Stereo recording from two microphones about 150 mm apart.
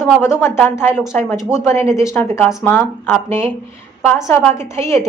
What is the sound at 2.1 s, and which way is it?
A woman's voice, 20° left (ahead or behind).